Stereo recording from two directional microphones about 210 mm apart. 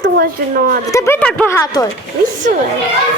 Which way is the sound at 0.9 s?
15° left (ahead or behind).